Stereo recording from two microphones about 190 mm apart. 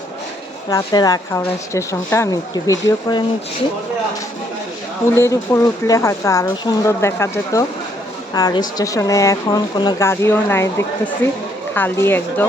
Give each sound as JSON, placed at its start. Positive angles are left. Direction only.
{"t": 0.7, "sound": "speech", "side_deg": 20}
{"t": 5.1, "sound": "speech", "side_deg": 15}